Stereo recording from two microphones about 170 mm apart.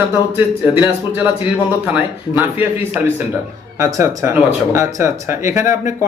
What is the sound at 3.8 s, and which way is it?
Speech, 20° right (ahead or behind).